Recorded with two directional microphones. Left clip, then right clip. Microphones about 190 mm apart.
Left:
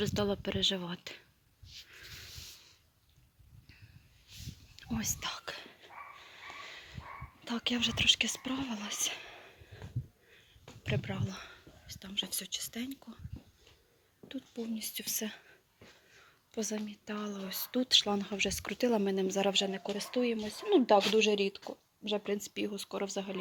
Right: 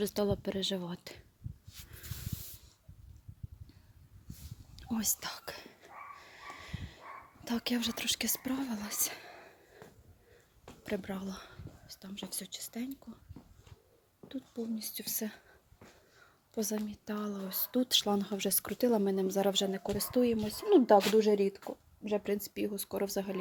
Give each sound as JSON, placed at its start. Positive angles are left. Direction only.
{"t": 0.0, "sound": "speech", "side_deg": -5}
{"t": 4.8, "sound": "whispering", "side_deg": -15}
{"t": 7.4, "sound": "speech", "side_deg": -15}
{"t": 10.8, "sound": "speech", "side_deg": -15}
{"t": 14.3, "sound": "speech", "side_deg": -5}
{"t": 16.8, "sound": "speech", "side_deg": -15}
{"t": 21.0, "sound": "speech", "side_deg": -5}